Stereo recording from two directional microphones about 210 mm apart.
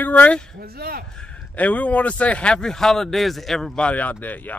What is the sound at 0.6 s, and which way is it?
Speech, 45° right (ahead or behind).